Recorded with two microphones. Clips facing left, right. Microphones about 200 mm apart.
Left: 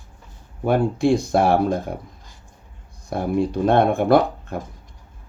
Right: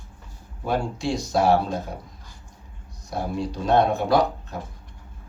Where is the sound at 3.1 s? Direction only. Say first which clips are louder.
Left 6 dB; 55° left (ahead or behind).